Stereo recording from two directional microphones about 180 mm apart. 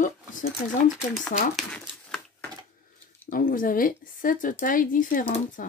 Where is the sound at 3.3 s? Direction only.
50° left (ahead or behind).